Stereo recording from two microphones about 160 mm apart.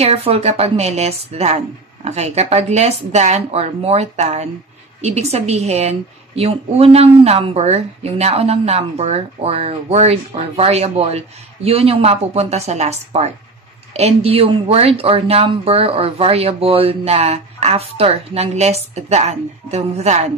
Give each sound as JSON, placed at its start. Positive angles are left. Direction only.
{"t": 0.0, "sound": "a woman's voice", "side_deg": -40}